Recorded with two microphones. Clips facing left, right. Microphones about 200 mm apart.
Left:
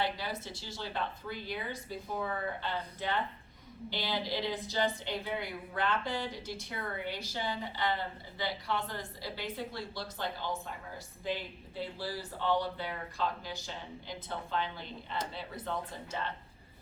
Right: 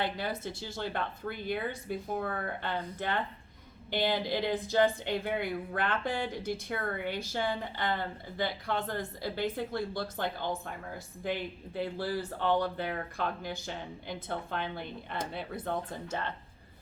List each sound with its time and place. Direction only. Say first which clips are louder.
0.0 s a woman's voice: right 2 dB; 55° right (ahead or behind)